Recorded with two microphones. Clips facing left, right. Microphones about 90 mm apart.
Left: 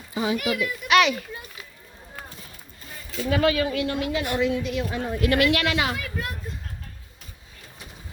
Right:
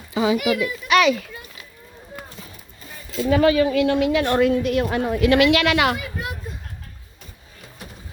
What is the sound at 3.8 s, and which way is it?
A woman's voice, 85° right.